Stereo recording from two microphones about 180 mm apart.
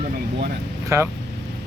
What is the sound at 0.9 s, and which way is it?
Speech, 15° right (ahead or behind).